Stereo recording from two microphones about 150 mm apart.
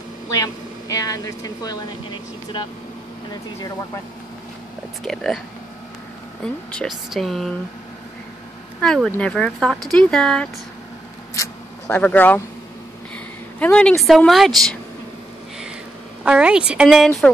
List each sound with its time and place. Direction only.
0.3 s speech: 20° left (ahead or behind)
3.3 s speech: 25° left (ahead or behind)
5.0 s speech: centre (ahead or behind)
6.4 s speech: 5° left (ahead or behind)
8.8 s speech: 5° left (ahead or behind)
11.3 s a sound: 20° left (ahead or behind)
12.0 s speech: 10° left (ahead or behind)
13.6 s speech: 10° left (ahead or behind)
16.3 s speech: 5° right (ahead or behind)